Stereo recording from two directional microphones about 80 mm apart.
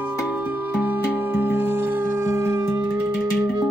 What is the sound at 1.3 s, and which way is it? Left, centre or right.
Music, right.